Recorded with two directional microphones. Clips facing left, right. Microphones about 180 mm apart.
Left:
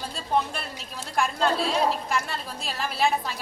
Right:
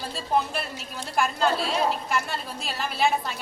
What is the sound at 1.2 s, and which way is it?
A woman's voice, centre (ahead or behind).